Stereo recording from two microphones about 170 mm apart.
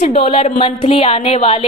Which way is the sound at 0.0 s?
35° left (ahead or behind).